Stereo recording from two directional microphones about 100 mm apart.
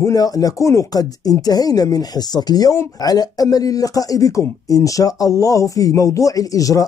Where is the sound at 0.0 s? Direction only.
35° left (ahead or behind).